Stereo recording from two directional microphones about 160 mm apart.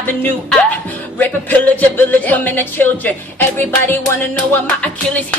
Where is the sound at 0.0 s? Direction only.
10° left (ahead or behind).